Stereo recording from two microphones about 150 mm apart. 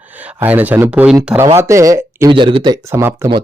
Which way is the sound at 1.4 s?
20° right (ahead or behind).